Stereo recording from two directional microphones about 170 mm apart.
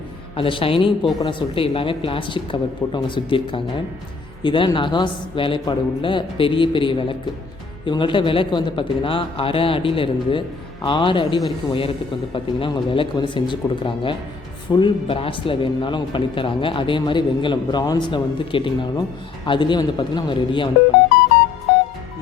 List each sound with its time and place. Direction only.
0.3 s speech: 30° left (ahead or behind)